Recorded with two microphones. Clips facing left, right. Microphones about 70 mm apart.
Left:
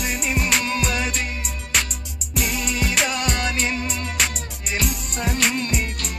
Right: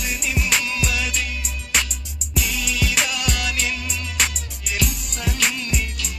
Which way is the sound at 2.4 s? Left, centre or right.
Left.